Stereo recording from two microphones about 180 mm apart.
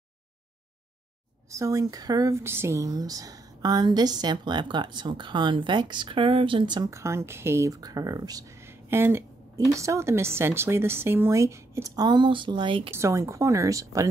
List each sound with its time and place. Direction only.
1.5 s speech: 20° right (ahead or behind)
12.9 s speech: 15° right (ahead or behind)